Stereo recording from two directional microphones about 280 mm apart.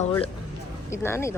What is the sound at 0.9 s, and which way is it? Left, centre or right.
Speech, centre.